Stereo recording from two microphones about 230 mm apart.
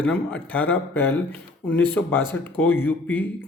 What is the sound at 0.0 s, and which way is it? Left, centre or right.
Speech, centre.